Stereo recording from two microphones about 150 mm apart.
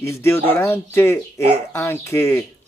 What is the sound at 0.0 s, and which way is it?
A man's voice, 15° left (ahead or behind).